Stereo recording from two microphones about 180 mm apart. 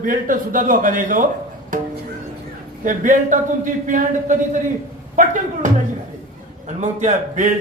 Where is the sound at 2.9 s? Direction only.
45° right (ahead or behind).